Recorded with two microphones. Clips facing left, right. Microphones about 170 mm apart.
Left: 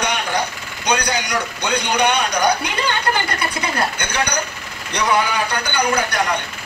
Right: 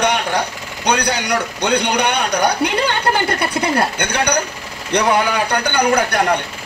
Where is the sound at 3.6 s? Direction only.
60° right (ahead or behind).